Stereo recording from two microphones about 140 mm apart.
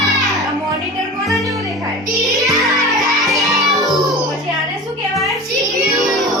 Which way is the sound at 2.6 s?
Centre (ahead or behind).